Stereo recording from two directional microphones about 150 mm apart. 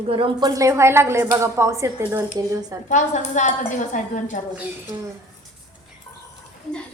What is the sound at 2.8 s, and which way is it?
Speech, 55° left (ahead or behind).